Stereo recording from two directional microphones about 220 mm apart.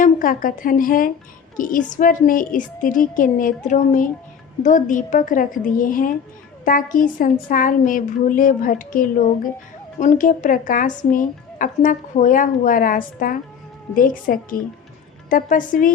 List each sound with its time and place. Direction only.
0.0 s a woman's voice: 40° left (ahead or behind)